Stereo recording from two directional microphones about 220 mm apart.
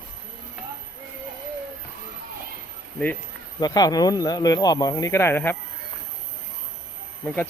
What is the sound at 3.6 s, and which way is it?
Speech, 15° left (ahead or behind).